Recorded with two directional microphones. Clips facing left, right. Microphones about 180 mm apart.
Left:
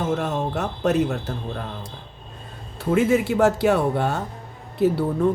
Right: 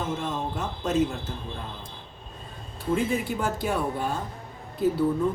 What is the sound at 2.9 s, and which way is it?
Speech, 80° left.